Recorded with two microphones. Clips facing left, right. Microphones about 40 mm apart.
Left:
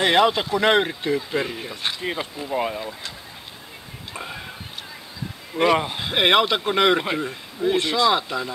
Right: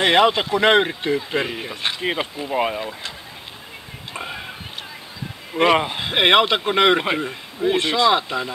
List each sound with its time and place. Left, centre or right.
0.0 s a man's voice: right
4.1 s a sound: right
5.5 s a man's voice: right